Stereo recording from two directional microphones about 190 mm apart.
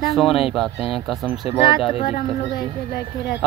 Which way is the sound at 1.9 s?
25° left (ahead or behind).